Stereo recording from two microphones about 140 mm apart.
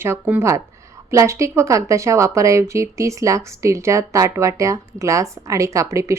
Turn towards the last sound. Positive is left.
turn(degrees=-20)  # may be behind; listen again after turning